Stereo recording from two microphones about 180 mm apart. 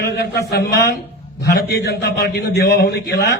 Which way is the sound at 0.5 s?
65° left (ahead or behind).